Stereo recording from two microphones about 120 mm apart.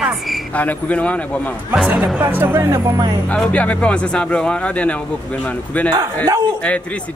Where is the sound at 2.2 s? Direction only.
15° right (ahead or behind).